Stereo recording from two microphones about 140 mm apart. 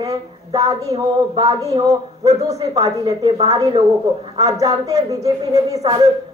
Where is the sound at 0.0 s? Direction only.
25° right (ahead or behind).